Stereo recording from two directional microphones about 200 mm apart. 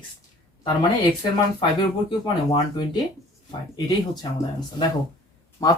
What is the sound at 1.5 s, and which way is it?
Speech, 25° left (ahead or behind).